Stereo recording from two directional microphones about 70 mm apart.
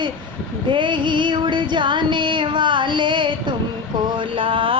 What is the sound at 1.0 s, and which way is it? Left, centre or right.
Music, right.